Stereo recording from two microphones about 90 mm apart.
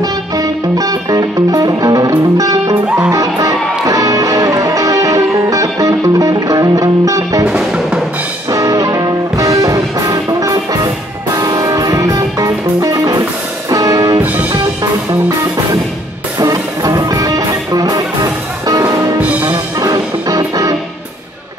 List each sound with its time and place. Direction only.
0.0 s music: 40° right (ahead or behind)
7.4 s music: 10° right (ahead or behind)
8.5 s music: 40° right (ahead or behind)
14.2 s music: 20° right (ahead or behind)
16.3 s music: 45° right (ahead or behind)
19.1 s music: 15° right (ahead or behind)
19.8 s music: 45° right (ahead or behind)